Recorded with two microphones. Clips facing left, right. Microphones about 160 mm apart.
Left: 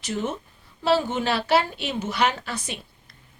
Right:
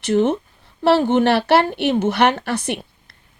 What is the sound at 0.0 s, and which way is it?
A woman's voice, 65° right (ahead or behind).